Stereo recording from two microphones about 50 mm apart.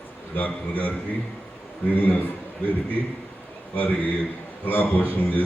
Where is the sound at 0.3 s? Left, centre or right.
Left.